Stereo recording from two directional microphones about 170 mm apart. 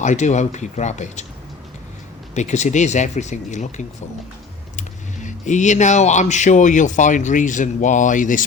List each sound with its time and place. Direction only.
0.0 s speech: 45° left (ahead or behind)
2.3 s speech: 45° left (ahead or behind)